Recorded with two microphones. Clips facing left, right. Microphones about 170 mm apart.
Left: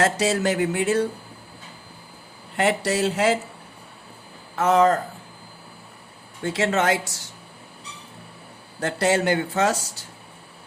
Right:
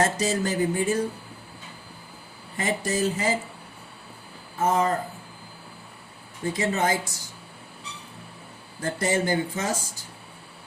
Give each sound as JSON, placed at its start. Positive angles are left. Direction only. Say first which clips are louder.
{"t": 0.0, "sound": "speech", "louder": "left 3 dB", "side_deg": 80}
{"t": 2.6, "sound": "speech", "louder": "left 4 dB", "side_deg": 75}
{"t": 4.5, "sound": "speech", "louder": "left 5 dB", "side_deg": 80}
{"t": 6.4, "sound": "speech", "louder": "left 3 dB", "side_deg": 80}
{"t": 8.8, "sound": "speech", "louder": "left 4 dB", "side_deg": 75}